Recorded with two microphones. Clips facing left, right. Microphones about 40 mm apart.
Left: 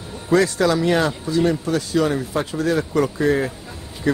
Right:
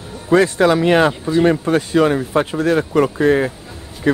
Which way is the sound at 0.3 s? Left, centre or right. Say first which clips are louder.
Right 4 dB; right.